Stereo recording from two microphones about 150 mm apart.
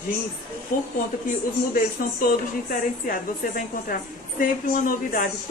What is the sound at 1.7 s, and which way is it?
A woman's voice, 65° left (ahead or behind).